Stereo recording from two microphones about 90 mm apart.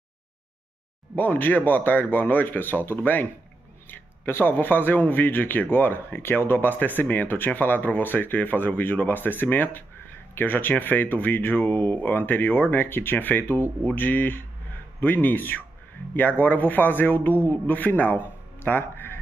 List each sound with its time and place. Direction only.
1.1 s speech: 20° left (ahead or behind)